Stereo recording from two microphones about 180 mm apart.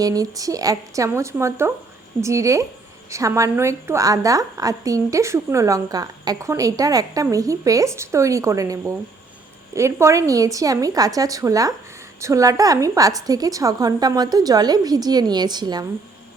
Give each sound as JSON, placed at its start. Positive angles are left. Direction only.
{"t": 0.0, "sound": "a woman's voice", "side_deg": -20}